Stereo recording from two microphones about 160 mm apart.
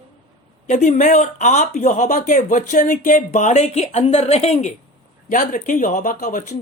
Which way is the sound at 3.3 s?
45° left (ahead or behind).